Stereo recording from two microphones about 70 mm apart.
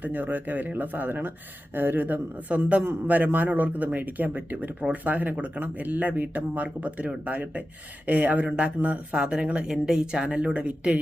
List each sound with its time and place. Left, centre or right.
0.0 s a man's voice: right